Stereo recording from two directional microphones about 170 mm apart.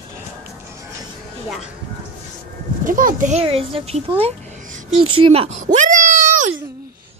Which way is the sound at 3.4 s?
35° right (ahead or behind).